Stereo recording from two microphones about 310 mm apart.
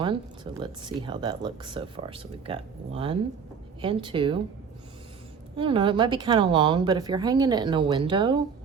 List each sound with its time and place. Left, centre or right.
0.0 s speech: centre
5.5 s speech: centre